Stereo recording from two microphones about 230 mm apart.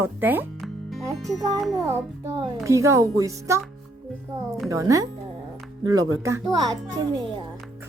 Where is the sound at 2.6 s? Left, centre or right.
Centre.